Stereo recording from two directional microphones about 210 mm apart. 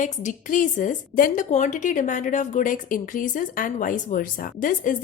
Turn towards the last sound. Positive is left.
turn(degrees=40)  # may be behind; listen again after turning